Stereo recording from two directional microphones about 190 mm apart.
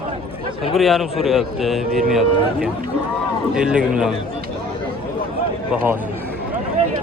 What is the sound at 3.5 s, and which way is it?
Speech, 5° right (ahead or behind).